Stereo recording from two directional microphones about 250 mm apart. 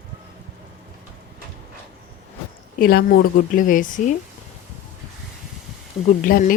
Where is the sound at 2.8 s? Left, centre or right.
Left.